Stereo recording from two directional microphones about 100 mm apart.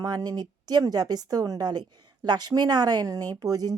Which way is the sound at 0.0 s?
40° right (ahead or behind).